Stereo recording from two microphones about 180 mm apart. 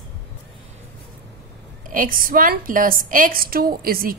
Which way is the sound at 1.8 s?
50° right (ahead or behind).